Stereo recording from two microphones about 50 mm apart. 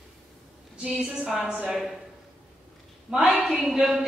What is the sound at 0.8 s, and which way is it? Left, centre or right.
Speech, centre.